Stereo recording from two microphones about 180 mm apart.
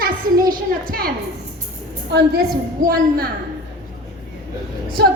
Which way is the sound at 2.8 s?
55° right (ahead or behind).